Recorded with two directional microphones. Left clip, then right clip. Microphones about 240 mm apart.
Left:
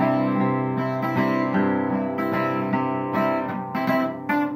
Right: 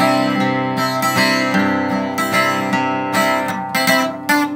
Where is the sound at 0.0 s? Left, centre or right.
Right.